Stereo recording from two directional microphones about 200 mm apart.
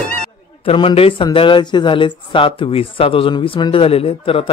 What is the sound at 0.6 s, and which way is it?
Speech, 25° left (ahead or behind).